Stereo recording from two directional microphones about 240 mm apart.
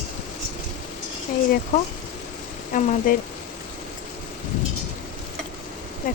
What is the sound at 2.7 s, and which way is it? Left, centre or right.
Speech, left.